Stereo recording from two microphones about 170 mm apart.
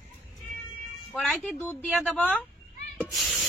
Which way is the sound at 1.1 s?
5° left (ahead or behind).